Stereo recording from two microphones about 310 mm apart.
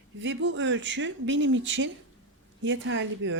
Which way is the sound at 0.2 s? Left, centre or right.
Right.